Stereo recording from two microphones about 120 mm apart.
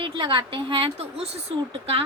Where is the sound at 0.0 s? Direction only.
45° right (ahead or behind).